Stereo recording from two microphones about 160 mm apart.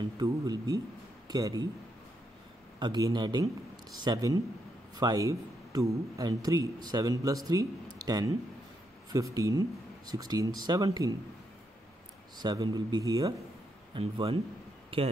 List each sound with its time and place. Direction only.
0.2 s speech: 25° right (ahead or behind)
2.8 s speech: 25° right (ahead or behind)
12.4 s speech: 25° right (ahead or behind)
13.9 s speech: 35° right (ahead or behind)